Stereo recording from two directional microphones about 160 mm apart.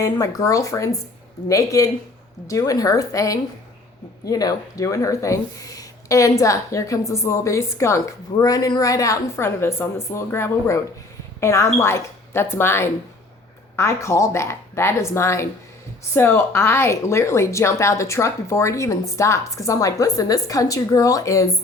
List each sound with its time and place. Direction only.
0.0 s a woman's voice: 20° left (ahead or behind)